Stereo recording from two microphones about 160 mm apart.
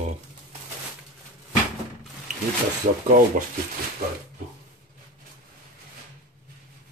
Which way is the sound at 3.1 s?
55° right (ahead or behind).